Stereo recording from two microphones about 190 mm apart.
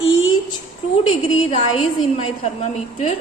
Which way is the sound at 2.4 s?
35° left (ahead or behind).